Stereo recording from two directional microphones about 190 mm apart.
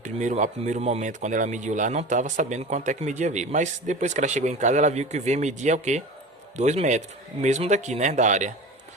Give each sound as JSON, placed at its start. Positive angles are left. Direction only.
{"t": 0.0, "sound": "speech", "side_deg": -40}